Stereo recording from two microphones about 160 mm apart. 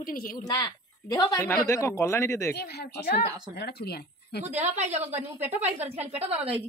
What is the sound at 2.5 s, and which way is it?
A woman's voice, 90° left.